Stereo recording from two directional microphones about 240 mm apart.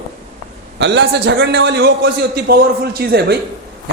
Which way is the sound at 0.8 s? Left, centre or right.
Right.